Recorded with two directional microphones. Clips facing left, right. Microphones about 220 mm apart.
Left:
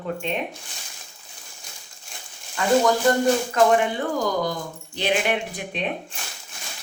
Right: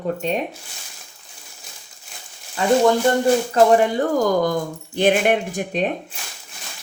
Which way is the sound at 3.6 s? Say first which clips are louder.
Right 6 dB; 35° right (ahead or behind).